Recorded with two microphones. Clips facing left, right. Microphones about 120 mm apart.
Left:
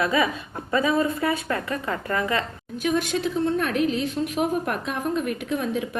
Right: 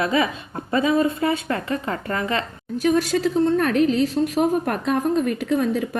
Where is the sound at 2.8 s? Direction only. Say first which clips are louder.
Right 4 dB; 40° right (ahead or behind).